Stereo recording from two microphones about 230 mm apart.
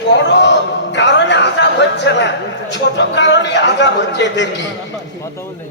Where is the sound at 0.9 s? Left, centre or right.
Left.